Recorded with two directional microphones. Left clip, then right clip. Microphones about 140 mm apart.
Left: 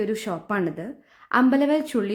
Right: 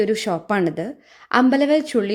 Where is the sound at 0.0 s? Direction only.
20° right (ahead or behind).